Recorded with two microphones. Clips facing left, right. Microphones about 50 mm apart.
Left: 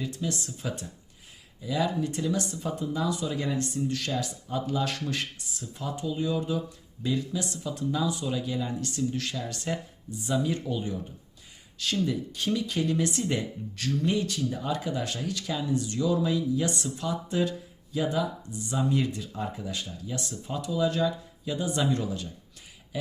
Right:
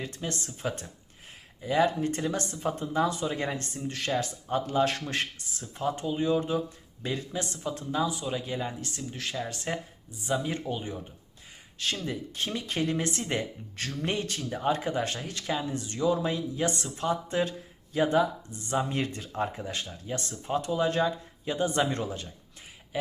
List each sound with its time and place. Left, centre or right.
0.0 s speech: right
9.0 s speech: centre
9.4 s speech: right
12.0 s speech: right